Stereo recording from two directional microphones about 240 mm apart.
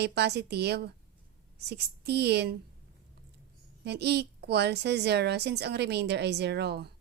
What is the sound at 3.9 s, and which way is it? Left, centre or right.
A woman's voice, right.